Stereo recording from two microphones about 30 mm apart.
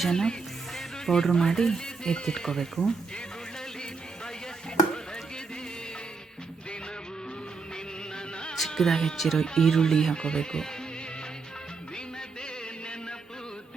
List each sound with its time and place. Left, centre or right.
0.1 s speech: left
8.1 s music: left
8.7 s speech: centre
9.1 s speech: centre
9.4 s speech: centre
10.2 s speech: left